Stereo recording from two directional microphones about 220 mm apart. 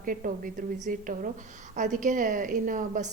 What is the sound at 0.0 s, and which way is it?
A woman's voice, 40° right (ahead or behind).